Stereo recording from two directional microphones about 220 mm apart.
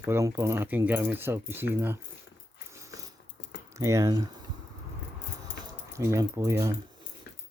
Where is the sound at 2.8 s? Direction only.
15° right (ahead or behind).